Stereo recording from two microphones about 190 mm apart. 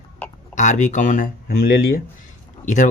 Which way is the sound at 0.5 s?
40° left (ahead or behind).